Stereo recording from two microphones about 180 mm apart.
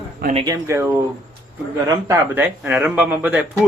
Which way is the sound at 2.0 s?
10° right (ahead or behind).